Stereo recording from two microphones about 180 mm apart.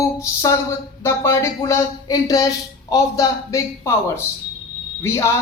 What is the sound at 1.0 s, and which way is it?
Speech, 15° left (ahead or behind).